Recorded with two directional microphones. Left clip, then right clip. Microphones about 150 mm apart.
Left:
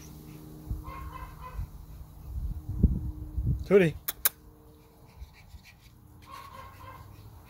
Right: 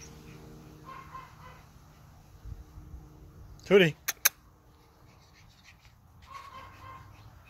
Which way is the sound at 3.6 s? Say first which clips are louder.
Even; centre (ahead or behind).